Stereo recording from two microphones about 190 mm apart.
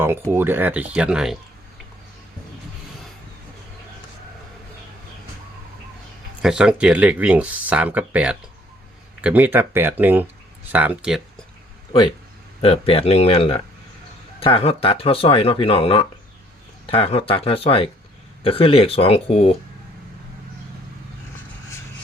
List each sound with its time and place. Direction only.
0.0 s speech: 10° right (ahead or behind)
6.4 s speech: 5° right (ahead or behind)
12.6 s speech: 30° left (ahead or behind)